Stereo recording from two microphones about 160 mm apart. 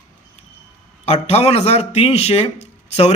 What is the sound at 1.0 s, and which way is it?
Speech, 40° left (ahead or behind).